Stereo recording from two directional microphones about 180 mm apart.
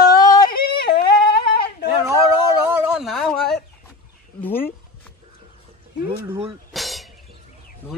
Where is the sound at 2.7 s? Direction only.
5° right (ahead or behind).